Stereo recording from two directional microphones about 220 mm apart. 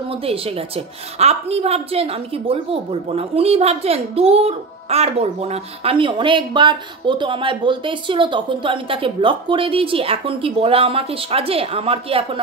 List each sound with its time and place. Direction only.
0.1 s a woman's voice: 25° right (ahead or behind)